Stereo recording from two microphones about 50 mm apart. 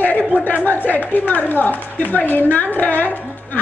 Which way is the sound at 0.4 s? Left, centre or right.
Left.